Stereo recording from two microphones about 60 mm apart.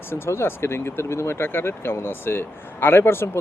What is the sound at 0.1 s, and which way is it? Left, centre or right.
Speech, left.